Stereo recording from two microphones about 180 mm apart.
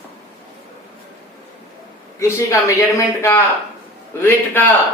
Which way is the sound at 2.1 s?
15° left (ahead or behind).